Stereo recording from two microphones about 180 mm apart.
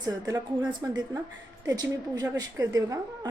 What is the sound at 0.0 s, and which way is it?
A woman's voice, 20° right (ahead or behind).